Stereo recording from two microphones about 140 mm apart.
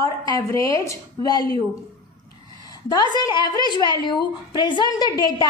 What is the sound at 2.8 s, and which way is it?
A woman's voice, 30° left (ahead or behind).